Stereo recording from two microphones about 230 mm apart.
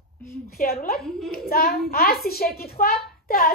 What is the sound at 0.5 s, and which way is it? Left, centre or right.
A woman's voice, left.